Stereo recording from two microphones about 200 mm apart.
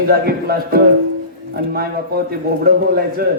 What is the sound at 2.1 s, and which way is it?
A man's voice, 50° right (ahead or behind).